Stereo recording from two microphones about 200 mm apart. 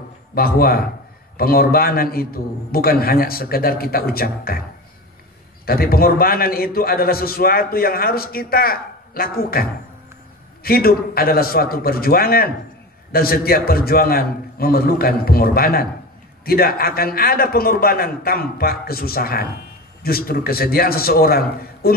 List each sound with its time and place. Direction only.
0.3 s a man's voice: 50° left (ahead or behind)
5.7 s a man's voice: 50° left (ahead or behind)